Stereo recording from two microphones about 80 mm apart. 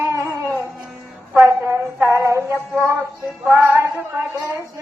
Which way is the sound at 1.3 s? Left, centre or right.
Right.